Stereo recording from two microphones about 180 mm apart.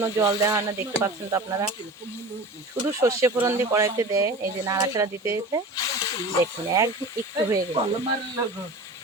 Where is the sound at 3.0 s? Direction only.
15° right (ahead or behind).